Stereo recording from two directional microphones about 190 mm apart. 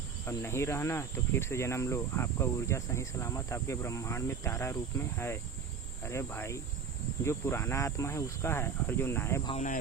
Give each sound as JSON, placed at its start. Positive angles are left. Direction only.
{"t": 0.3, "sound": "speech", "side_deg": 15}
{"t": 9.5, "sound": "speech", "side_deg": 35}